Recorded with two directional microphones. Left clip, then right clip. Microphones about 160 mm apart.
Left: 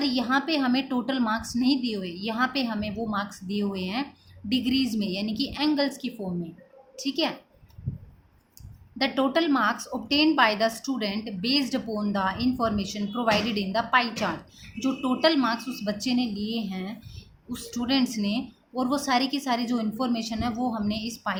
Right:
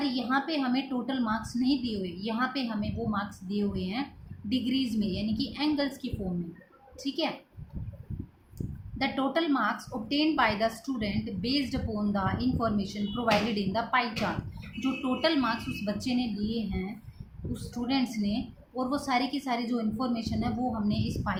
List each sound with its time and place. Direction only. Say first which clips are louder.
0.0 s a woman's voice: left 4 dB; 45° left (ahead or behind)
8.5 s a woman's voice: left 5 dB; 45° left (ahead or behind)